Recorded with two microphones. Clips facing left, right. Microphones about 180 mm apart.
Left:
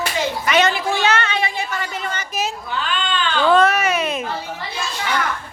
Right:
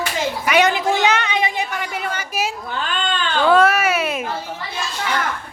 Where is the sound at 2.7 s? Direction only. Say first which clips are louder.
Even; 45° right (ahead or behind).